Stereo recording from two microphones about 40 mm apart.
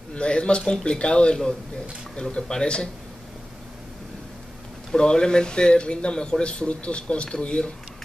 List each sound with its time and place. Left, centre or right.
0.1 s speech: left
4.9 s speech: centre